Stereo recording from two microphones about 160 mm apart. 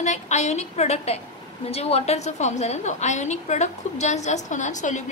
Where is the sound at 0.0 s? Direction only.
45° left (ahead or behind).